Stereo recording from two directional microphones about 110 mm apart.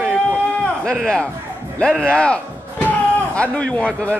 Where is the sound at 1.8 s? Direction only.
10° left (ahead or behind).